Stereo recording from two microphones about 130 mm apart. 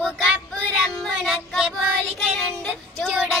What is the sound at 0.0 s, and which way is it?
Child singing, 5° left (ahead or behind).